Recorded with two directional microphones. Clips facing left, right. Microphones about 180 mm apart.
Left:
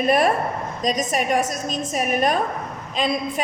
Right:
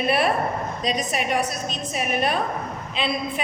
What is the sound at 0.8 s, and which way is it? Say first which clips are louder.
A woman's voice: left 4 dB; 45° left (ahead or behind).